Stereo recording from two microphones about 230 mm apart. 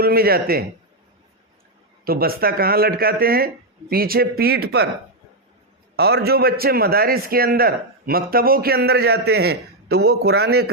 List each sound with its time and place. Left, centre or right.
0.0 s a man's voice: right
2.0 s speech: right
6.0 s a man's voice: right